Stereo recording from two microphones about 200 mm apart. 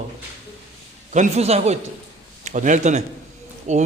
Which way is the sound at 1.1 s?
30° right (ahead or behind).